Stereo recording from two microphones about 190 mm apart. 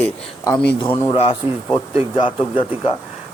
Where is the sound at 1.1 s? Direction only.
35° left (ahead or behind).